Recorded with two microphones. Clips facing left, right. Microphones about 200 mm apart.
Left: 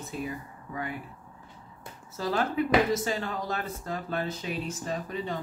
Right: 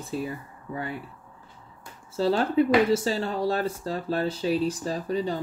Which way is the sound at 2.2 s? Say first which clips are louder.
Right 6 dB; 30° right (ahead or behind).